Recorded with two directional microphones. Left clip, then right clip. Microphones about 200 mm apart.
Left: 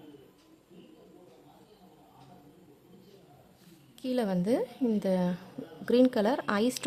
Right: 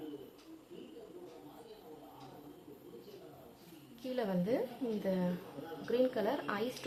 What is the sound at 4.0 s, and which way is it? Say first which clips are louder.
A woman's voice: left 6 dB; 55° left (ahead or behind).